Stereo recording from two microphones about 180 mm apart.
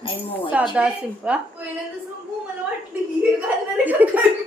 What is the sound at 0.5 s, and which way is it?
A woman's voice, 5° right (ahead or behind).